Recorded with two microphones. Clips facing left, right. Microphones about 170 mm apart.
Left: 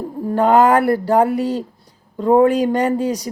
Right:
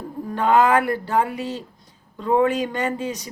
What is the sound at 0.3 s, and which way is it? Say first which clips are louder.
Speech: left 5 dB; 40° left (ahead or behind).